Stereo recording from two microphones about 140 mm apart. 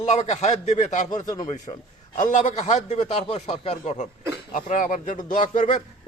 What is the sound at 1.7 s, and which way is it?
Speech, 40° left (ahead or behind).